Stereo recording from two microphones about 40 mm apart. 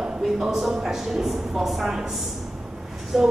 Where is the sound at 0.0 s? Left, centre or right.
Centre.